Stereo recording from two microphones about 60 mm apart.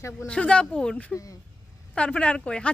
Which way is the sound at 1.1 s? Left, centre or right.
Left.